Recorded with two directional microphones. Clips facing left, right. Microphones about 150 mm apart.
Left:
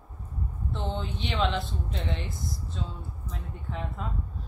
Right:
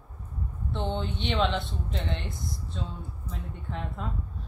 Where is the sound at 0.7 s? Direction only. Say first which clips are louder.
Right 3 dB; centre (ahead or behind).